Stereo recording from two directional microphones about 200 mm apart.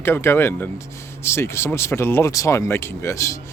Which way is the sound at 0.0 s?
10° left (ahead or behind).